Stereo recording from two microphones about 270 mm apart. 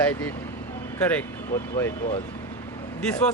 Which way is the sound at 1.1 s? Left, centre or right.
Centre.